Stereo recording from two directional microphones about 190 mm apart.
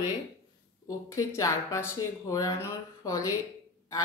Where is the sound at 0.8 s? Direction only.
15° left (ahead or behind).